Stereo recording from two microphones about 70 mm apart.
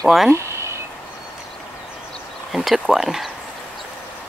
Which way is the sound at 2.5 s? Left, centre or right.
Centre.